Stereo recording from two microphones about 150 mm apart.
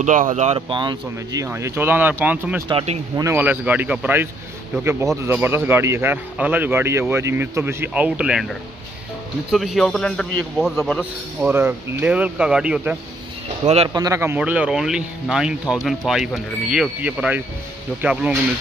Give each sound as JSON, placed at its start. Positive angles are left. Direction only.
{"t": 0.0, "sound": "speech", "side_deg": -55}
{"t": 0.6, "sound": "speech", "side_deg": -30}
{"t": 1.4, "sound": "speech", "side_deg": -15}
{"t": 2.7, "sound": "speech", "side_deg": -45}
{"t": 3.2, "sound": "speech", "side_deg": -15}
{"t": 9.5, "sound": "a man's voice", "side_deg": 0}
{"t": 13.8, "sound": "a man's voice", "side_deg": -25}